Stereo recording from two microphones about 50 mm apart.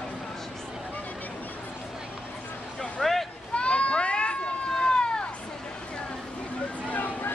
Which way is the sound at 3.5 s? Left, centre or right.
Left.